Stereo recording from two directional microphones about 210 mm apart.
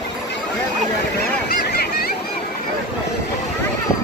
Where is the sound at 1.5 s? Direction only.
45° left (ahead or behind).